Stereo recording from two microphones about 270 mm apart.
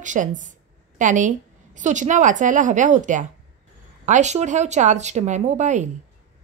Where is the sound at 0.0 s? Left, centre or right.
Right.